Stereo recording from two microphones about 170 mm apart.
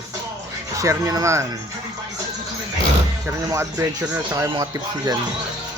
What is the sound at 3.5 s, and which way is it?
Speech, 15° right (ahead or behind).